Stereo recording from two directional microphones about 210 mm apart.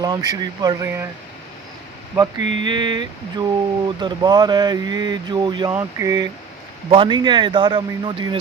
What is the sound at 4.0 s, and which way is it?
Speech, 20° right (ahead or behind).